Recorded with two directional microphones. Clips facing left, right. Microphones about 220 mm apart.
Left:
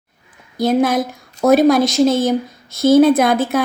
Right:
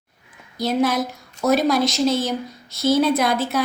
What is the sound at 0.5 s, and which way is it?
A woman's voice, 50° left (ahead or behind).